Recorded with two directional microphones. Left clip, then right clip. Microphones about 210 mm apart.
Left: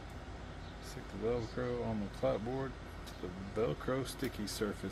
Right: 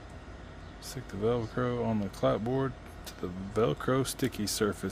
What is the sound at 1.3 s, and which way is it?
Speech, 55° right (ahead or behind).